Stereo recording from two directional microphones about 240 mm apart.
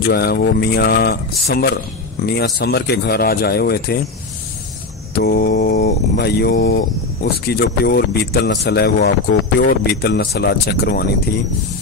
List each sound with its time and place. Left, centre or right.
0.1 s speech: left
5.1 s speech: left